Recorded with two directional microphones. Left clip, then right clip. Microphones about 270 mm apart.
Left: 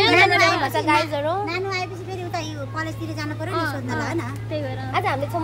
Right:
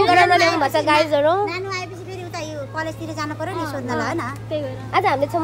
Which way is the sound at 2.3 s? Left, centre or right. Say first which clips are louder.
Right 3 dB; centre.